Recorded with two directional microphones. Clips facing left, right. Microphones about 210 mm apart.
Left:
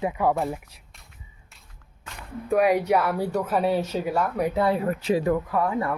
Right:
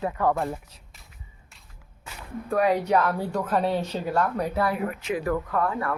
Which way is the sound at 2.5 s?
10° left (ahead or behind).